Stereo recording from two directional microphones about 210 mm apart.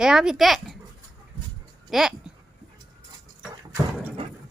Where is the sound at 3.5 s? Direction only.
15° right (ahead or behind).